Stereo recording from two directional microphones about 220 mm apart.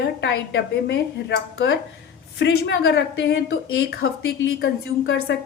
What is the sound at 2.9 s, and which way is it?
A woman's voice, 50° left (ahead or behind).